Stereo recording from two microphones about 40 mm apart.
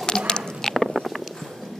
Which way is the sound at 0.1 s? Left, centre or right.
Centre.